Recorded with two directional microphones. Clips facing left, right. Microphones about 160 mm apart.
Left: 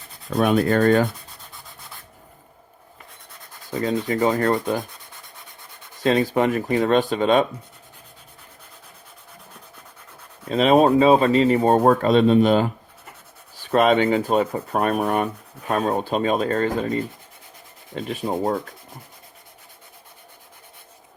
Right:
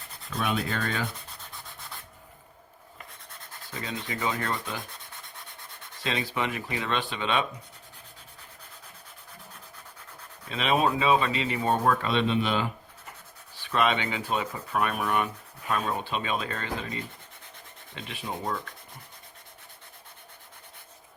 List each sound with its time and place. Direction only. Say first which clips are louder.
0.3 s speech: left 11 dB; 55° left (ahead or behind)
1.5 s rub: even; centre (ahead or behind)
3.7 s speech: left 13 dB; 50° left (ahead or behind)
6.0 s speech: left 11 dB; 45° left (ahead or behind)
10.5 s a man's voice: left 10 dB; 40° left (ahead or behind)